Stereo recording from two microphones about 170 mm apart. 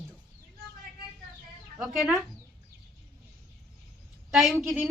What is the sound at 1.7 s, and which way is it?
Speech, centre (ahead or behind).